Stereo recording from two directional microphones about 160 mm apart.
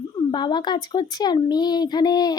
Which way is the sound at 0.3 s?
30° left (ahead or behind).